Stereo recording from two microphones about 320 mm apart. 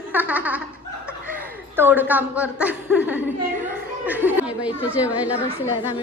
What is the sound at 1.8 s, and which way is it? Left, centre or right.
Speech, centre.